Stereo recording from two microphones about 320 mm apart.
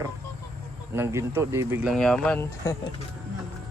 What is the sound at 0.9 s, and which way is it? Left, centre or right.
Speech, centre.